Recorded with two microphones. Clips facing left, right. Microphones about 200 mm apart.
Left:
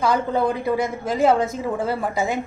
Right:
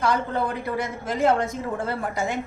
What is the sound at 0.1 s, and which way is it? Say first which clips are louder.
A woman's voice: left 4 dB; 10° left (ahead or behind).